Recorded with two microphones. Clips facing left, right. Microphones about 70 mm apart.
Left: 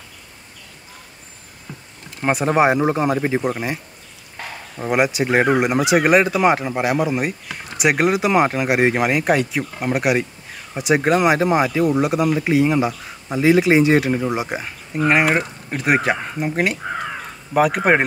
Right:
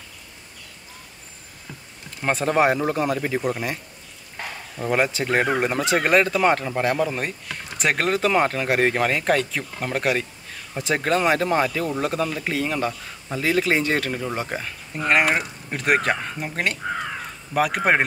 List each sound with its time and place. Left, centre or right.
1.7 s speech: centre